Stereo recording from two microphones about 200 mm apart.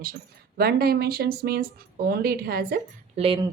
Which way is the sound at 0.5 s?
50° right (ahead or behind).